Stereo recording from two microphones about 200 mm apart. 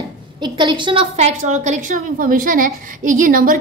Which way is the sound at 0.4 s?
25° right (ahead or behind).